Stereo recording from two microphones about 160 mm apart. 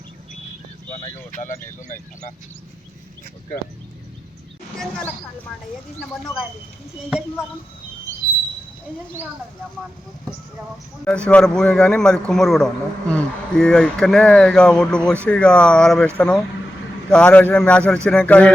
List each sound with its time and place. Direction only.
0.9 s speech: 45° left (ahead or behind)
4.8 s a man's voice: 5° left (ahead or behind)
7.1 s a man's voice: 5° right (ahead or behind)
11.3 s a man's voice: 5° left (ahead or behind)